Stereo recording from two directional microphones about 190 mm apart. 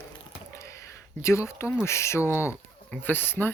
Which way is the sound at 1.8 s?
15° left (ahead or behind).